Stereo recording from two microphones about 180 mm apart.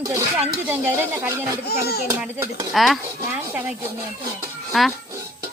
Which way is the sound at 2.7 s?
Centre (ahead or behind).